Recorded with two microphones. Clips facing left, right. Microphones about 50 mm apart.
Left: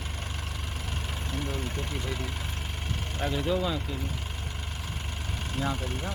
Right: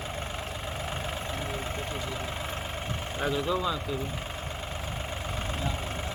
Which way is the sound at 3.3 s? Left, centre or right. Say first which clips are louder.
Even; centre.